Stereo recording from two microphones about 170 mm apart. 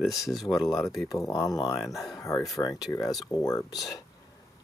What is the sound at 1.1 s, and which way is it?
Speech, 20° left (ahead or behind).